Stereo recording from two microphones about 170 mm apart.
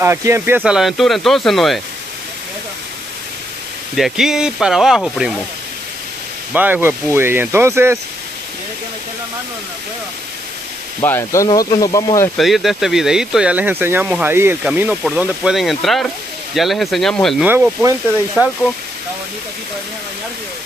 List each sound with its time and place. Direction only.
0.0 s speech: 15° right (ahead or behind); by 1.8 s centre (ahead or behind)
3.9 s speech: centre (ahead or behind)
6.5 s speech: 10° right (ahead or behind)
11.0 s speech: 15° left (ahead or behind)
12.4 s speech: centre (ahead or behind)
17.5 s speech: 10° right (ahead or behind)